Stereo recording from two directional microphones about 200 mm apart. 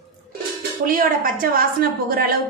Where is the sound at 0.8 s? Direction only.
45° right (ahead or behind).